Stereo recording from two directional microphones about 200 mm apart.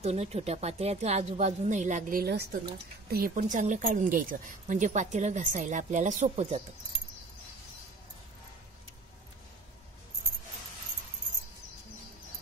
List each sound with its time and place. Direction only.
0.0 s speech: 30° right (ahead or behind)